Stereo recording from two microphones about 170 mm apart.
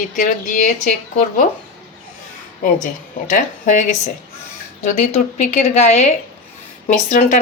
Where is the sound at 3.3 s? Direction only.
50° left (ahead or behind).